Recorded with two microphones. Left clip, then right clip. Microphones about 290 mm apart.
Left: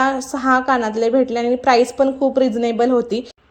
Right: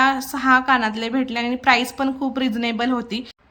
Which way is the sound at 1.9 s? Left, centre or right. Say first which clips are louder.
Left 8 dB; centre.